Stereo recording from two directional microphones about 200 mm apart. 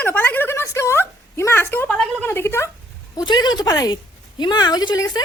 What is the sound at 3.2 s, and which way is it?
Speech, 20° left (ahead or behind).